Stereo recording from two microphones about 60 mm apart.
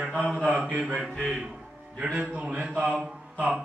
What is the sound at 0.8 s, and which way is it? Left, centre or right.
Speech, centre.